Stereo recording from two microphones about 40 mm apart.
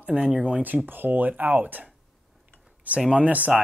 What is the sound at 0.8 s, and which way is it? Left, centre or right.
Speech, right.